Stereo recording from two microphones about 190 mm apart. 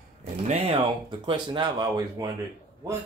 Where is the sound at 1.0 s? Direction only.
25° right (ahead or behind).